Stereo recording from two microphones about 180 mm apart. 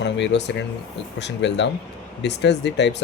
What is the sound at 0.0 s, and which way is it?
Speech, 75° left (ahead or behind).